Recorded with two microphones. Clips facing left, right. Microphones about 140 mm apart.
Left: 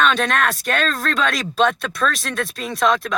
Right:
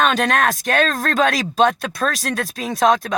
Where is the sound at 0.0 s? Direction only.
45° right (ahead or behind).